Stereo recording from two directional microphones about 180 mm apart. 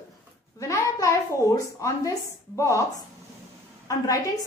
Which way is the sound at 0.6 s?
20° left (ahead or behind).